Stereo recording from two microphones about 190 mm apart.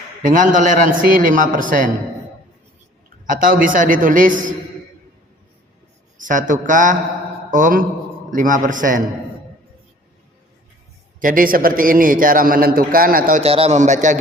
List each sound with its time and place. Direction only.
0.2 s a man's voice: 45° right (ahead or behind)
3.2 s a man's voice: 45° right (ahead or behind)
6.1 s a man's voice: 45° right (ahead or behind)
11.2 s a man's voice: 45° right (ahead or behind)
13.4 s a man's voice: 30° right (ahead or behind)